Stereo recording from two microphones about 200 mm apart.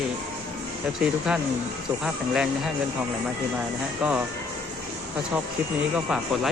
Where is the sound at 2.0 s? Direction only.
5° right (ahead or behind).